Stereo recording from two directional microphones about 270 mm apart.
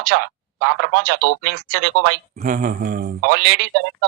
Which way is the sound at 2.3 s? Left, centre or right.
Right.